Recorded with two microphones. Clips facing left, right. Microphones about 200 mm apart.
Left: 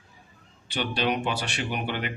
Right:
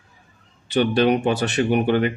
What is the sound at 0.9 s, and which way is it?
A man's voice, 50° right (ahead or behind).